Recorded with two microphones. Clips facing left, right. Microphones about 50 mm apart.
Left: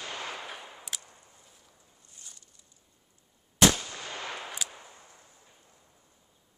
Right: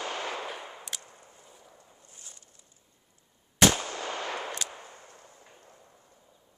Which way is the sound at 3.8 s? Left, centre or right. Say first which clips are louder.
Right 5 dB; right.